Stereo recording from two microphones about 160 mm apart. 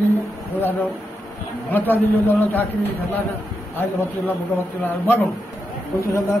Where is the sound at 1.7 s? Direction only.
15° left (ahead or behind).